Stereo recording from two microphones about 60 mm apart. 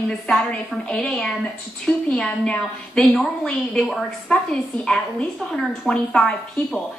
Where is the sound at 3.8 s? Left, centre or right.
Centre.